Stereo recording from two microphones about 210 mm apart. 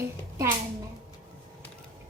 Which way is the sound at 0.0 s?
10° right (ahead or behind).